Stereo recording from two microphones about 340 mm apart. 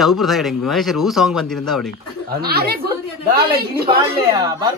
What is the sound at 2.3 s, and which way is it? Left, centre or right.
Speech, right.